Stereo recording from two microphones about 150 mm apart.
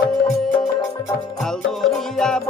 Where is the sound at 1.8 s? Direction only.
5° left (ahead or behind).